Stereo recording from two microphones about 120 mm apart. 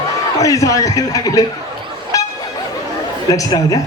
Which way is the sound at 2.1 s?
30° left (ahead or behind).